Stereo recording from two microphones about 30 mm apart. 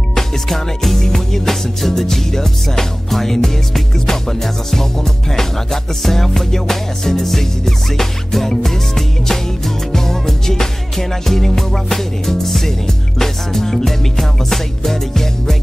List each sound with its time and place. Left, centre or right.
0.8 s music: centre